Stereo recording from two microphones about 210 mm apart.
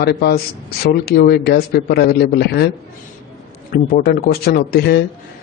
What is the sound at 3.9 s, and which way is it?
Speech, 45° left (ahead or behind).